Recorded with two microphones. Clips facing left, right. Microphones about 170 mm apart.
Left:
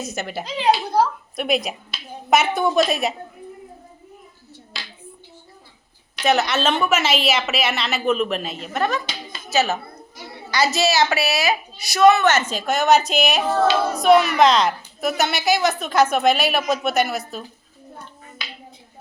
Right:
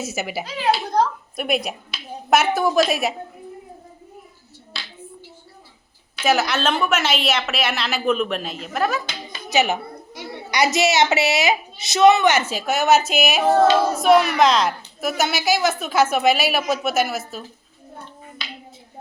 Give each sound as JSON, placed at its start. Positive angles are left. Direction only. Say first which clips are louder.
{"t": 0.0, "sound": "a woman's voice", "louder": "right 1 dB", "side_deg": -5}
{"t": 0.4, "sound": "a child's voice", "louder": "left 2 dB", "side_deg": 20}
{"t": 0.9, "sound": "a sound", "louder": "left 1 dB", "side_deg": 0}
{"t": 2.3, "sound": "a woman's voice", "louder": "even", "side_deg": 0}
{"t": 6.2, "sound": "a woman's voice", "louder": "left 1 dB", "side_deg": 0}
{"t": 9.5, "sound": "a woman's voice", "louder": "right 1 dB", "side_deg": -15}